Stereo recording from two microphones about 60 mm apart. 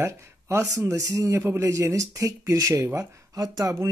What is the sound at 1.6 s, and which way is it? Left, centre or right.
Speech, right.